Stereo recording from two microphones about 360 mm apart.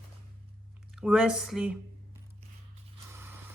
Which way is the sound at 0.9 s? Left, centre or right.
Centre.